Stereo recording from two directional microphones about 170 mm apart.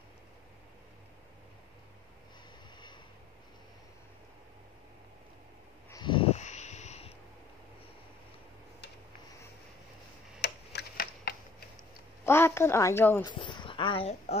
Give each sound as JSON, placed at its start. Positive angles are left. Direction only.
{"t": 5.9, "sound": "a sound", "side_deg": 25}
{"t": 10.4, "sound": "tick-tock", "side_deg": 75}
{"t": 12.3, "sound": "a woman's voice", "side_deg": 15}
{"t": 13.2, "sound": "speech", "side_deg": 25}